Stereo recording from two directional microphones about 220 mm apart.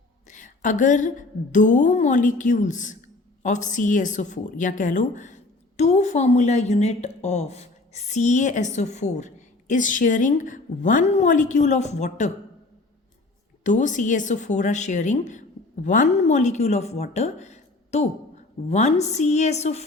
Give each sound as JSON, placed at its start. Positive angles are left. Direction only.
{"t": 0.3, "sound": "a sound", "side_deg": 35}
{"t": 1.5, "sound": "a woman's voice", "side_deg": 35}
{"t": 13.7, "sound": "a woman's voice", "side_deg": 35}